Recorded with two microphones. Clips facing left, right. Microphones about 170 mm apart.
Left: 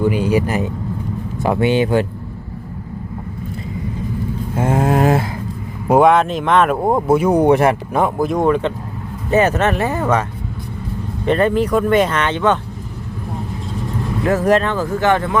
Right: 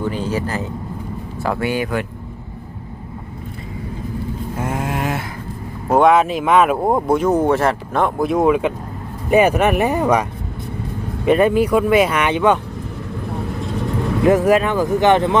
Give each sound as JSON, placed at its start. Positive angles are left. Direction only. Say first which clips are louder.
{"t": 0.0, "sound": "speech", "louder": "left 5 dB", "side_deg": 10}
{"t": 4.5, "sound": "a sound", "louder": "left 8 dB", "side_deg": 30}
{"t": 5.9, "sound": "speech", "louder": "left 1 dB", "side_deg": 0}
{"t": 11.3, "sound": "speech", "louder": "right 1 dB", "side_deg": -10}
{"t": 14.3, "sound": "speech", "louder": "right 1 dB", "side_deg": -15}